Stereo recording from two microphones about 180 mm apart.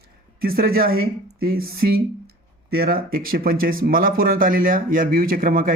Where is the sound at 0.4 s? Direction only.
55° right (ahead or behind).